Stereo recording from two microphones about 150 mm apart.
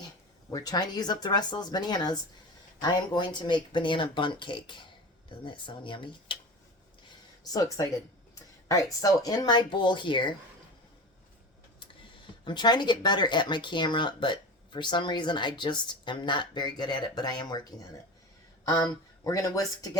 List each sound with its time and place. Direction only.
0.5 s speech: 25° left (ahead or behind)
7.1 s a sound: 25° left (ahead or behind)
8.4 s speech: 20° left (ahead or behind)
12.5 s speech: 30° left (ahead or behind)